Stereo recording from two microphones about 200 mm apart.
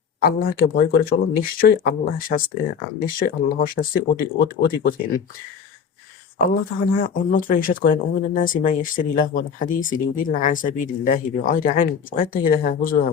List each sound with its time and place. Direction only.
0.2 s speech: 50° left (ahead or behind)
6.4 s speech: 45° left (ahead or behind)